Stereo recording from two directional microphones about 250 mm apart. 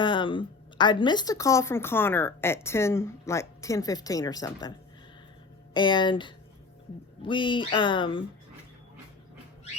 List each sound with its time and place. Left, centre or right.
0.0 s a woman's voice: centre
5.7 s speech: centre